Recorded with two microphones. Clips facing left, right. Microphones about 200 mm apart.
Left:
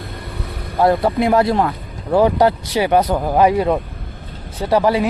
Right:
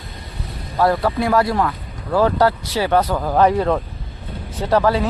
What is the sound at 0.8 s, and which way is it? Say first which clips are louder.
A man's voice: left 3 dB; 20° left (ahead or behind).